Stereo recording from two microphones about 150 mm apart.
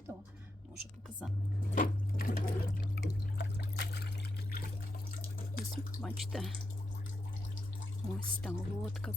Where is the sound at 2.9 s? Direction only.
90° left.